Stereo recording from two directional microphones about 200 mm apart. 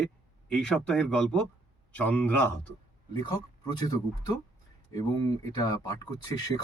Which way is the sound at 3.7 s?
20° left (ahead or behind).